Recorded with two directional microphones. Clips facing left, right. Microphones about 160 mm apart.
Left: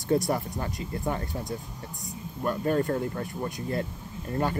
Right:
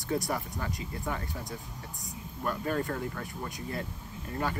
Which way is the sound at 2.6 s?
30° left (ahead or behind).